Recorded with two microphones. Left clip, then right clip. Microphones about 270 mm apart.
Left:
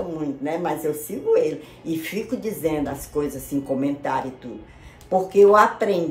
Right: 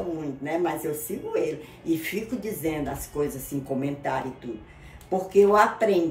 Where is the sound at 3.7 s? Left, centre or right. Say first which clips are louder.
Left 3 dB; centre.